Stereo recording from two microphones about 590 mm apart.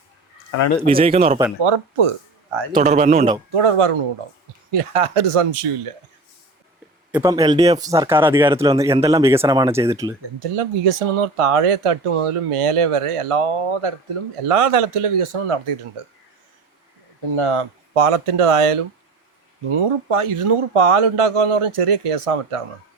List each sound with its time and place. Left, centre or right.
0.9 s speech: centre
1.6 s speech: right
2.7 s speech: centre
3.5 s speech: right
7.1 s speech: centre
10.4 s speech: right
17.3 s speech: right